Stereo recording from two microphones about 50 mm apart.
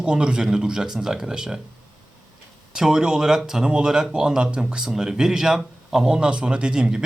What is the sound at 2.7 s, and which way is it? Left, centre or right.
A man's voice, centre.